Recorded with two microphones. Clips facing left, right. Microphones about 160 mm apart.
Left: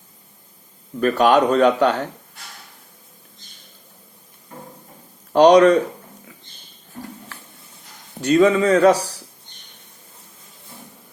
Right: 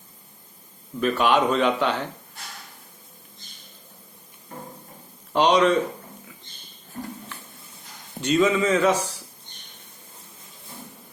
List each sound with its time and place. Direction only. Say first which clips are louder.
0.9 s speech: left 5 dB; 45° left (ahead or behind)
5.3 s speech: left 8 dB; 45° left (ahead or behind)
8.3 s speech: left 5 dB; 60° left (ahead or behind)
8.8 s speech: left 6 dB; 35° left (ahead or behind)